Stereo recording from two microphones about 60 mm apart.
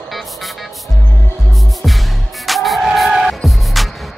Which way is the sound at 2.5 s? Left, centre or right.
Centre.